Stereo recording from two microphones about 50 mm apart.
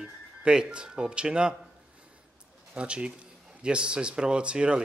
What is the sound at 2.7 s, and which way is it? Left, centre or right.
Speech, right.